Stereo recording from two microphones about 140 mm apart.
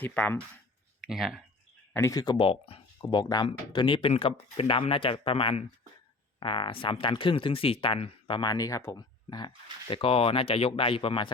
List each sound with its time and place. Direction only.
0.0 s speech: 10° left (ahead or behind)
1.0 s speech: 5° right (ahead or behind)
1.9 s speech: 20° left (ahead or behind)
9.9 s speech: 40° left (ahead or behind)